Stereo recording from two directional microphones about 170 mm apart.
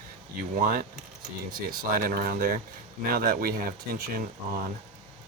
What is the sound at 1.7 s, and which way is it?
Speech, 60° right (ahead or behind).